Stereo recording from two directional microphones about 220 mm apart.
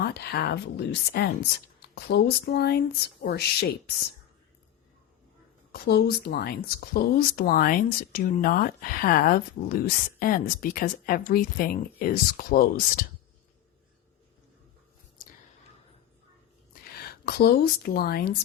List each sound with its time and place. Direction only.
0.0 s speech: 45° left (ahead or behind)
5.7 s speech: 45° left (ahead or behind)
17.0 s speech: 45° left (ahead or behind)